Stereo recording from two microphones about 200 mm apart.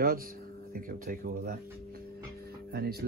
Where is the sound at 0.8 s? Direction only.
45° right (ahead or behind).